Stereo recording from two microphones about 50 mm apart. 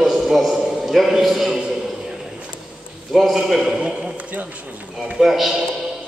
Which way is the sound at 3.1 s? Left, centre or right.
Centre.